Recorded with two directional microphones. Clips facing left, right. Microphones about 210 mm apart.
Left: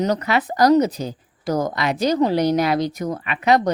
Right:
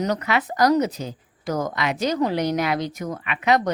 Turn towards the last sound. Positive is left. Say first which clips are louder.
# left 3 dB
turn(degrees=35)  # may be behind; listen again after turning